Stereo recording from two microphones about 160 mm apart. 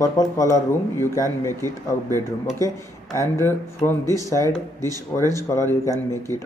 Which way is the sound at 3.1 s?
15° left (ahead or behind).